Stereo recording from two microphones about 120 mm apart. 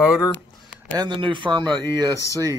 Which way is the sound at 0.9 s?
40° right (ahead or behind).